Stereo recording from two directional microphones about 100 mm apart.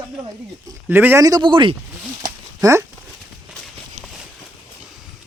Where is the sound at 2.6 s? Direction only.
30° right (ahead or behind).